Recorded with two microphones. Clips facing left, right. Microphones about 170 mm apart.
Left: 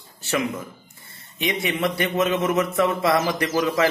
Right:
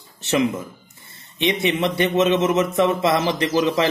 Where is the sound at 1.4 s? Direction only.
25° right (ahead or behind).